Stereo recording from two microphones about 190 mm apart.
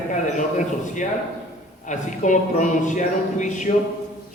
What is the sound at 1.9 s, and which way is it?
Speech, 40° left (ahead or behind).